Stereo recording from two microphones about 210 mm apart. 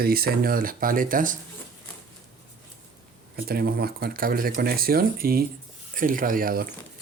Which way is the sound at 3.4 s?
45° right (ahead or behind).